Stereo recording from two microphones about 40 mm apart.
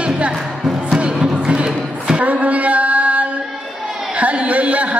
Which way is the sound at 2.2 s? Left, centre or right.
Right.